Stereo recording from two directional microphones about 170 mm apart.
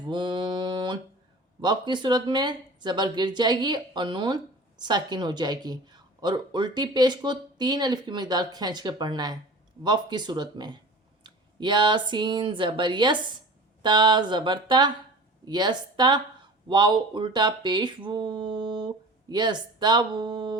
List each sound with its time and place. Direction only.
0.0 s mantra: 25° right (ahead or behind)
1.6 s speech: 25° right (ahead or behind)